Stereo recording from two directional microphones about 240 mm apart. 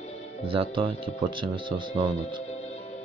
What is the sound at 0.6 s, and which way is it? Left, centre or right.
Speech, right.